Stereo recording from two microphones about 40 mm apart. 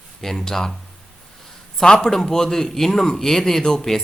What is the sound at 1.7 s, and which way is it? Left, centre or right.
A man's voice, centre.